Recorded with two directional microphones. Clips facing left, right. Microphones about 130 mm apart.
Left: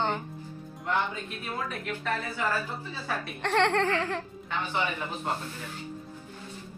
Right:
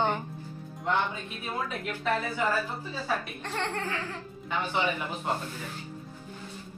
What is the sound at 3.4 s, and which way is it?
Laughter, 75° left (ahead or behind).